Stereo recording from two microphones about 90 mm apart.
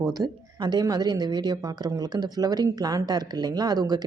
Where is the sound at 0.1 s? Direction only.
45° right (ahead or behind).